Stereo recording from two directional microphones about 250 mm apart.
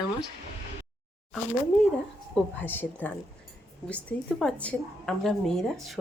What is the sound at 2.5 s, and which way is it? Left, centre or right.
A woman's voice, centre.